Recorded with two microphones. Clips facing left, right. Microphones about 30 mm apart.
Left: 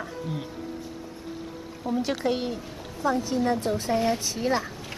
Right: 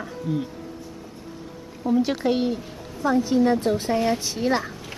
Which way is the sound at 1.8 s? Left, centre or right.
Centre.